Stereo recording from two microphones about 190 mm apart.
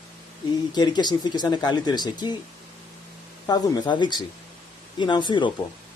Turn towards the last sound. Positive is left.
turn(degrees=25)  # may be behind; listen again after turning